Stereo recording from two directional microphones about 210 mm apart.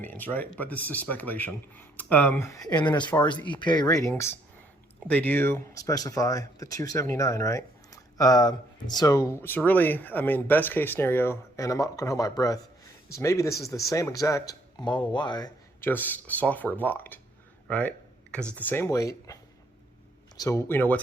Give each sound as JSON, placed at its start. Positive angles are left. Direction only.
{"t": 0.0, "sound": "speech", "side_deg": 10}